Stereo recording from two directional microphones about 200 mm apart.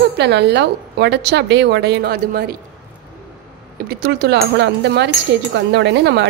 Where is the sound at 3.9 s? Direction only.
55° right (ahead or behind).